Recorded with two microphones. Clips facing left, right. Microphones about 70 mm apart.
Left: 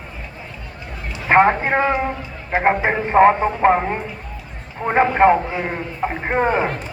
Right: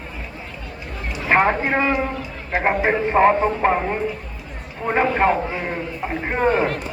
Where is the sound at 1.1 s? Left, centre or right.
Left.